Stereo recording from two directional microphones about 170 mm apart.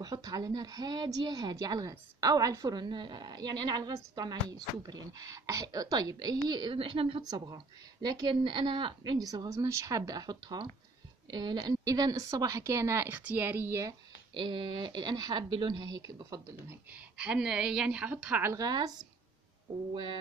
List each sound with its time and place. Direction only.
0.0 s a woman's voice: 20° right (ahead or behind)
14.3 s a woman's voice: 30° right (ahead or behind)
16.9 s a woman's voice: 5° right (ahead or behind); by 20.2 s 30° right (ahead or behind)